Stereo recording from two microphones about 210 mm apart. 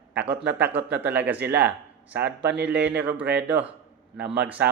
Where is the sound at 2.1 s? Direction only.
55° right (ahead or behind).